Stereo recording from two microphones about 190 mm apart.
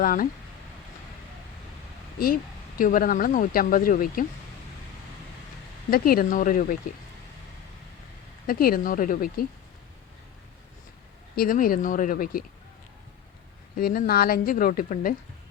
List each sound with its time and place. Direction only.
0.0 s speech: 50° left (ahead or behind)
2.1 s speech: 50° left (ahead or behind)
5.9 s speech: 50° left (ahead or behind)
8.4 s speech: 50° left (ahead or behind)
11.3 s speech: 50° left (ahead or behind)
13.7 s speech: 50° left (ahead or behind)